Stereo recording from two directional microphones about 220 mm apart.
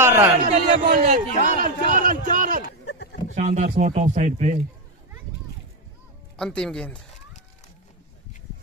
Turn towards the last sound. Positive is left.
turn(degrees=5)  # may be behind; listen again after turning